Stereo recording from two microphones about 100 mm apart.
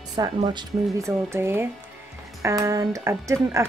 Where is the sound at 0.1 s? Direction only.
50° right (ahead or behind).